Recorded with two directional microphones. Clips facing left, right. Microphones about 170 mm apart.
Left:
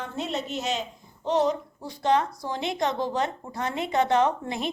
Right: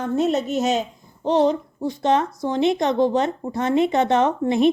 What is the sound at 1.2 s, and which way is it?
Speech, 30° right (ahead or behind).